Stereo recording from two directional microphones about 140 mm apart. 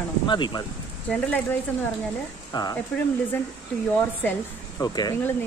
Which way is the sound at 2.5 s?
30° left (ahead or behind).